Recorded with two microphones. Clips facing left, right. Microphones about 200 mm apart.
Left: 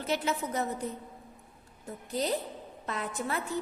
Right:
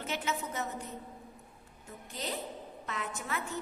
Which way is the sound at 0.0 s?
35° left (ahead or behind).